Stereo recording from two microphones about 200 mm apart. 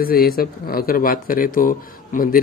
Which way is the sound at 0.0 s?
50° left (ahead or behind).